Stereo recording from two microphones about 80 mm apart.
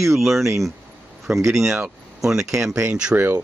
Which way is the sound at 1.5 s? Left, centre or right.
Centre.